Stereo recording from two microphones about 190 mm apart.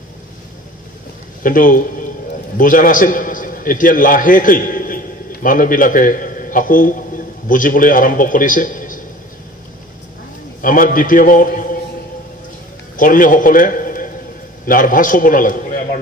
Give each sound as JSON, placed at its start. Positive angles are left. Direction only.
{"t": 1.4, "sound": "a man's voice", "side_deg": 45}
{"t": 10.6, "sound": "a man's voice", "side_deg": 45}
{"t": 12.9, "sound": "a man's voice", "side_deg": 45}